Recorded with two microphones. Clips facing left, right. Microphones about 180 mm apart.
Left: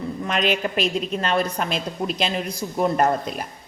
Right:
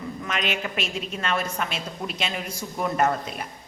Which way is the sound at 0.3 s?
35° left (ahead or behind).